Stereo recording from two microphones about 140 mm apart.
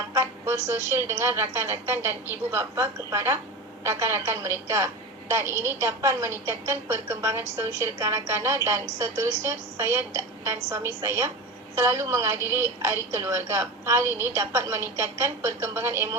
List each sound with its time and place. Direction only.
0.1 s a woman's voice: 20° right (ahead or behind)